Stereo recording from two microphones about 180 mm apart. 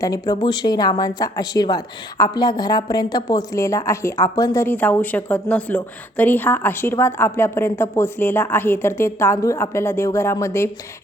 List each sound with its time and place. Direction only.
0.0 s speech: 20° left (ahead or behind)